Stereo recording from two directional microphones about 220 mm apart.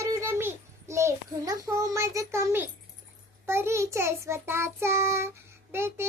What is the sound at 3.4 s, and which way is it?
Child singing, 10° right (ahead or behind).